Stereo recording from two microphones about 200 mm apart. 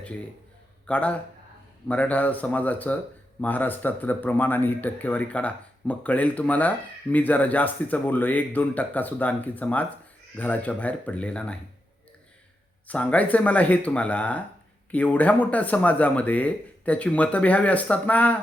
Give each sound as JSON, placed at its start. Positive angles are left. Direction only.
{"t": 0.9, "sound": "speech", "side_deg": 5}
{"t": 12.9, "sound": "speech", "side_deg": 5}